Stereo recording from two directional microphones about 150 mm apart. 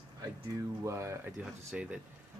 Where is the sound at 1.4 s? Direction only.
5° right (ahead or behind).